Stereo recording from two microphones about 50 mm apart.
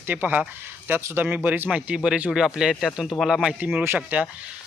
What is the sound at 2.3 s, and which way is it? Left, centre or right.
Speech, centre.